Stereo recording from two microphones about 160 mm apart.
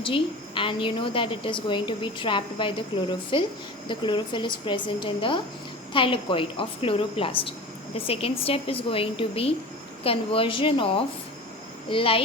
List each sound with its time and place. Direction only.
0.0 s a woman's voice: 30° left (ahead or behind)